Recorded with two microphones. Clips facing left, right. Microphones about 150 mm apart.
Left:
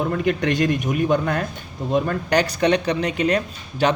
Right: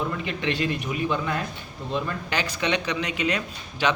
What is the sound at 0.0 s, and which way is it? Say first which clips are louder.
A man's voice: left 7 dB; 55° left (ahead or behind).